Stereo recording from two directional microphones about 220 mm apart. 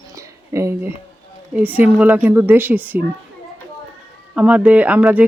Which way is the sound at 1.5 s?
5° right (ahead or behind).